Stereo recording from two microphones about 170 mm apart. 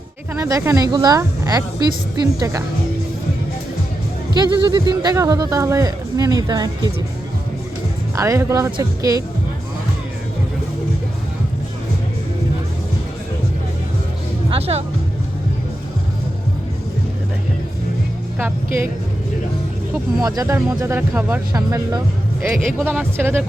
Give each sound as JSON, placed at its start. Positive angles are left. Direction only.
{"t": 0.3, "sound": "speech", "side_deg": -20}
{"t": 4.4, "sound": "speech", "side_deg": -25}
{"t": 8.1, "sound": "speech", "side_deg": -20}
{"t": 14.5, "sound": "speech", "side_deg": -40}
{"t": 18.3, "sound": "speech", "side_deg": -15}
{"t": 20.2, "sound": "speech", "side_deg": -20}
{"t": 21.5, "sound": "speech", "side_deg": -20}